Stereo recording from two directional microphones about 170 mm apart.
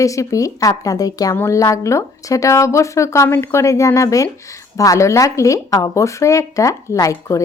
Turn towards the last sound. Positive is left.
turn(degrees=20)  # may be behind; listen again after turning